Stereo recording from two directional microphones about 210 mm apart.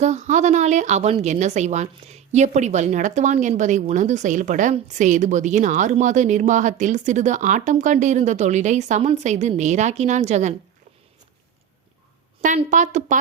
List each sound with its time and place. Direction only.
0.0 s speech: 35° right (ahead or behind)
12.4 s speech: 35° right (ahead or behind)